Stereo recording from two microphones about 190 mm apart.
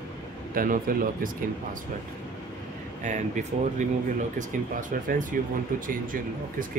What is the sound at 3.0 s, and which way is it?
Speech, 40° right (ahead or behind).